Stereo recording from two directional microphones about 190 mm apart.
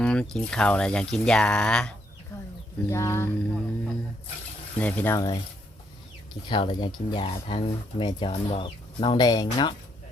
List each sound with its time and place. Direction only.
0.0 s speech: 5° left (ahead or behind)
2.9 s speech: 15° left (ahead or behind)
6.5 s speech: 25° left (ahead or behind)